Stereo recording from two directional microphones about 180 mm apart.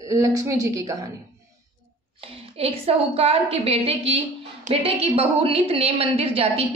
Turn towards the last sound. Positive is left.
turn(degrees=-35)  # may be behind; listen again after turning